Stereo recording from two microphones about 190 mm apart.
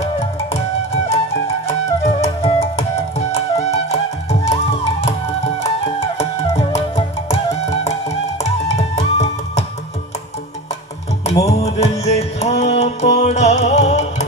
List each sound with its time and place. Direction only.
1.7 s music: 35° left (ahead or behind)
11.4 s music: 35° left (ahead or behind)